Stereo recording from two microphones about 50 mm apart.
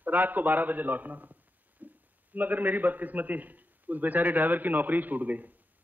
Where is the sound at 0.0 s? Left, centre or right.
Right.